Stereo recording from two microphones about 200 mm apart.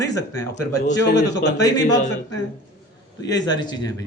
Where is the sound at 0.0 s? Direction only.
15° left (ahead or behind).